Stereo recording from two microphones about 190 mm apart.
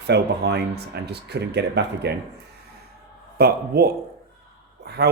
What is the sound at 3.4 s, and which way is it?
Speech, 55° right (ahead or behind).